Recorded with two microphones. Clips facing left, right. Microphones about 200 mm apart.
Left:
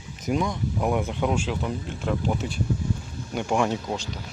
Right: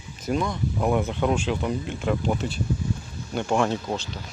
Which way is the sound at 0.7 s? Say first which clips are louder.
Right 2 dB; 5° left (ahead or behind).